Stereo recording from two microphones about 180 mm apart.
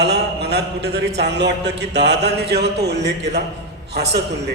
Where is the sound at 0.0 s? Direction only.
70° right (ahead or behind).